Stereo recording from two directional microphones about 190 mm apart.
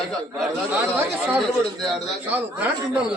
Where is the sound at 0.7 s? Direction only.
10° right (ahead or behind).